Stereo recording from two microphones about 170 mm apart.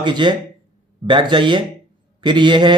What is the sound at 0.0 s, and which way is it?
Speech, 25° right (ahead or behind).